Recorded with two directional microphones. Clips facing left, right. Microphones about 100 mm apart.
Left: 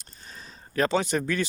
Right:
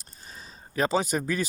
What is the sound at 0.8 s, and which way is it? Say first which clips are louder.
Speech: left 1 dB; 5° right (ahead or behind).